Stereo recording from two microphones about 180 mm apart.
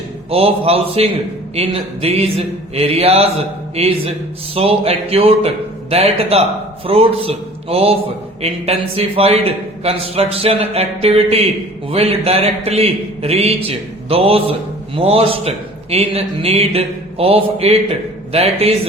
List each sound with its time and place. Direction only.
0.3 s a man's voice: 35° right (ahead or behind)